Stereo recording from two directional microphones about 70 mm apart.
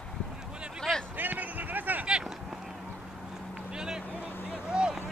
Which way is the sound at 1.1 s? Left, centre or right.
Right.